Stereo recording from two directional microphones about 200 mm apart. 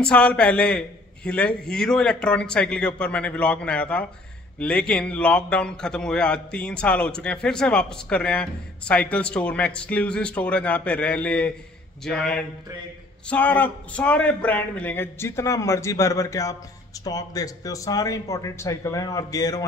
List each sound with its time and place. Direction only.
0.0 s a man's voice: 5° left (ahead or behind)